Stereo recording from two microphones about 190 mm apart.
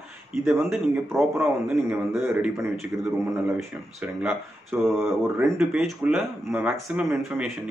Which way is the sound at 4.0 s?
5° right (ahead or behind).